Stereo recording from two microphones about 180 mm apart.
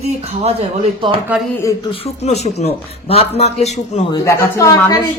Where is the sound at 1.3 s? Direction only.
10° right (ahead or behind).